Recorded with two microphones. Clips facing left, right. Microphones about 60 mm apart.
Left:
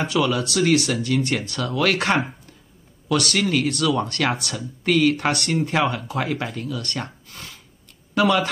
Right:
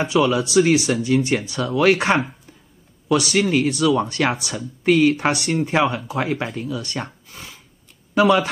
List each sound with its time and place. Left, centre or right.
0.3 s speech: centre